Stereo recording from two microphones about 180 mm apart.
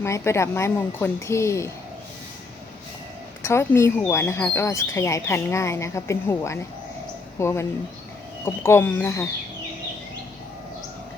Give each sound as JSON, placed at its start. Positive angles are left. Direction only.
{"t": 0.0, "sound": "speech", "side_deg": 15}
{"t": 3.4, "sound": "speech", "side_deg": 15}